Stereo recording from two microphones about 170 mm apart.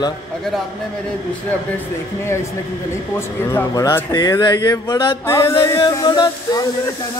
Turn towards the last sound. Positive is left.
turn(degrees=25)  # may be behind; listen again after turning